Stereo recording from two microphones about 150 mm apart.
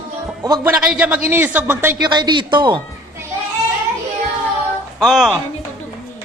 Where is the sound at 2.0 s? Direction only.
30° right (ahead or behind).